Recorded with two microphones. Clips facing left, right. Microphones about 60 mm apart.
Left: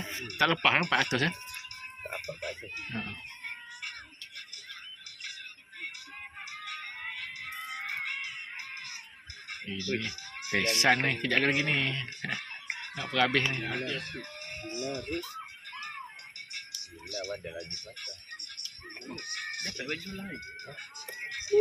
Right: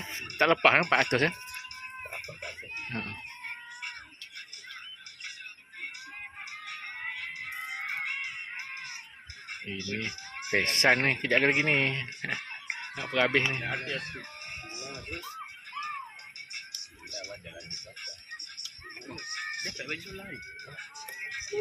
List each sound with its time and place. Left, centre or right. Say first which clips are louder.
0.2 s speech: right 4 dB; right
2.9 s speech: right 1 dB; right
6.7 s a sound: right 2 dB; right
9.5 s fowl: even; right
10.0 s music: right 2 dB; right
10.6 s speech: right 1 dB; right
14.1 s music: even; right
19.0 s music: right 1 dB; right
19.8 s speech: left 1 dB; right